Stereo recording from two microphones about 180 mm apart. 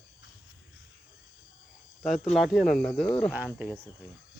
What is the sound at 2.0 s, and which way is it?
Speech, centre (ahead or behind).